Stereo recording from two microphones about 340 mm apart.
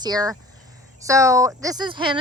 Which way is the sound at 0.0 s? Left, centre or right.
Centre.